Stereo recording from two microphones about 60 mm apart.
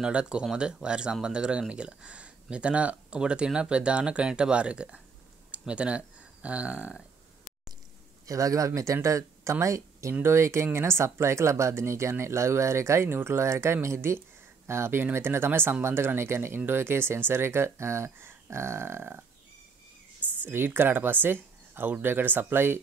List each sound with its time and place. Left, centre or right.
0.0 s speech: centre
8.3 s speech: right
20.4 s speech: right